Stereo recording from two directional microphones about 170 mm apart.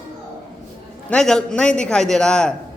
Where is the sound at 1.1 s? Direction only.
5° left (ahead or behind).